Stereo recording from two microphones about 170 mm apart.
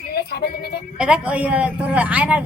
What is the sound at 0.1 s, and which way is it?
Music, 70° left (ahead or behind).